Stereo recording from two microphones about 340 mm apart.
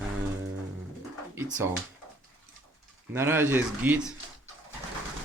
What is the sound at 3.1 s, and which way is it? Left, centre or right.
Speech, centre.